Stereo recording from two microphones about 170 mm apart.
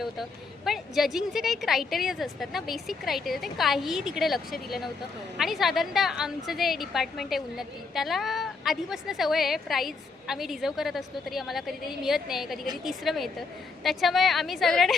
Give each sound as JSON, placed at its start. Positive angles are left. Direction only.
{"t": 0.0, "sound": "a woman's voice", "side_deg": 0}